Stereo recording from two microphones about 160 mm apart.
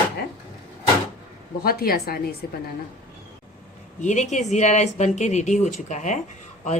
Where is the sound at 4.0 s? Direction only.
50° left (ahead or behind).